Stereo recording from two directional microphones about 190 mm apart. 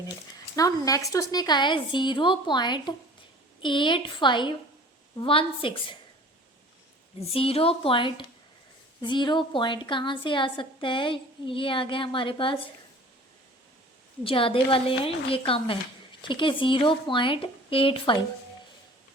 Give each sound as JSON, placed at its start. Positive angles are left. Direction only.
{"t": 0.5, "sound": "a woman's voice", "side_deg": 20}
{"t": 7.2, "sound": "a woman's voice", "side_deg": 30}
{"t": 14.3, "sound": "a woman's voice", "side_deg": 30}